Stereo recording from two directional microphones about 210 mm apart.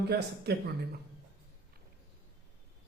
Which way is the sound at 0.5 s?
50° right (ahead or behind).